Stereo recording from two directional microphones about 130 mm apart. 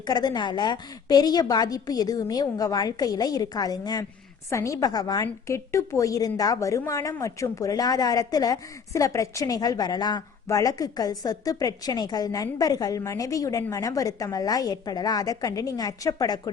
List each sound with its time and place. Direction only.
0.1 s a woman's voice: 35° left (ahead or behind)